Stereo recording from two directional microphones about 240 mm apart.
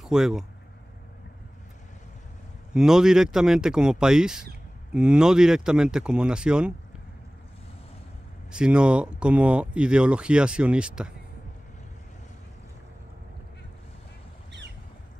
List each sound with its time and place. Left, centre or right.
0.0 s speech: centre
2.7 s speech: centre
8.5 s speech: centre